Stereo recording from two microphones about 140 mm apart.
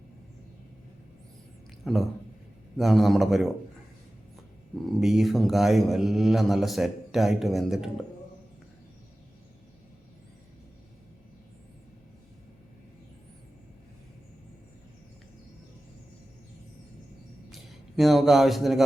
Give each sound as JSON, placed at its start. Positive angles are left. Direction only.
{"t": 1.8, "sound": "speech", "side_deg": 0}
{"t": 4.7, "sound": "speech", "side_deg": 0}
{"t": 17.5, "sound": "speech", "side_deg": 0}